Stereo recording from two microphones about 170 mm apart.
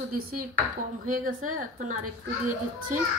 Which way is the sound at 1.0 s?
50° right (ahead or behind).